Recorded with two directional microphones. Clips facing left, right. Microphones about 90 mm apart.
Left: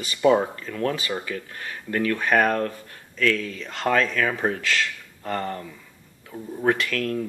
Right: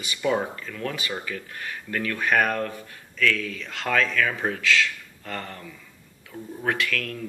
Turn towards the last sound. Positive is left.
turn(degrees=30)  # may be behind; listen again after turning